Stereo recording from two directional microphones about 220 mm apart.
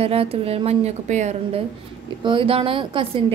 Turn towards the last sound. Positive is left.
turn(degrees=-25)  # may be behind; listen again after turning